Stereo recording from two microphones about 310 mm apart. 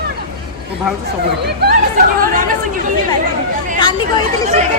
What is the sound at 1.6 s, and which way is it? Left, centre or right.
Speech, right.